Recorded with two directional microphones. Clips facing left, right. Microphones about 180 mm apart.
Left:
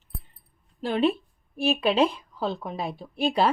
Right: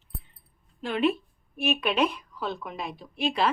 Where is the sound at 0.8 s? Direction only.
30° left (ahead or behind).